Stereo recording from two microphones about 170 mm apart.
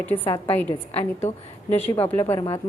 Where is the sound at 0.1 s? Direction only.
30° left (ahead or behind).